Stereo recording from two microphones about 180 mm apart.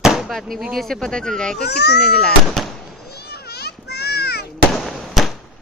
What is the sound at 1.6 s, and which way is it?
Speech, 65° left (ahead or behind).